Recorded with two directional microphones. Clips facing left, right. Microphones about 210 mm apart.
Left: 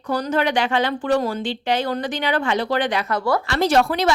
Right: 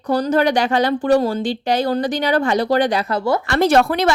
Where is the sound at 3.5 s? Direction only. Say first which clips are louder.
Right 4 dB; 55° right (ahead or behind).